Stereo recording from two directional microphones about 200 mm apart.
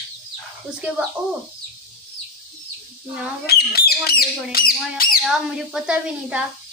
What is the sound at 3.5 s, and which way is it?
Speech, 50° left (ahead or behind).